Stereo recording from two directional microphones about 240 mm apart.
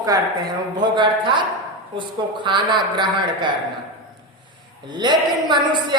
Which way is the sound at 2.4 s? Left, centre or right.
Centre.